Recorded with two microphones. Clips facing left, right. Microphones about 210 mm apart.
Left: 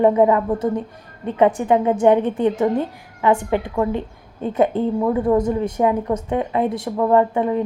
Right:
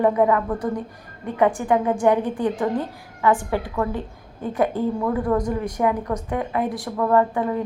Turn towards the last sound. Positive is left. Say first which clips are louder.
# left 3 dB
turn(degrees=20)  # may be behind; listen again after turning